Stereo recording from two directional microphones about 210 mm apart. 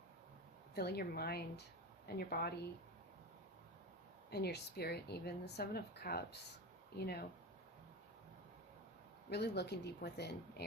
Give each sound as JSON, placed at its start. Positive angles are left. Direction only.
{"t": 0.8, "sound": "a woman's voice", "side_deg": 50}
{"t": 4.3, "sound": "a woman's voice", "side_deg": 50}
{"t": 9.3, "sound": "a woman's voice", "side_deg": 50}